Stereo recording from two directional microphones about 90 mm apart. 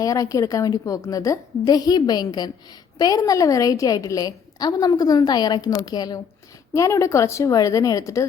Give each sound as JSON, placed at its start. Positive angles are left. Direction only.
{"t": 0.0, "sound": "a woman's voice", "side_deg": 40}
{"t": 6.7, "sound": "a woman's voice", "side_deg": 35}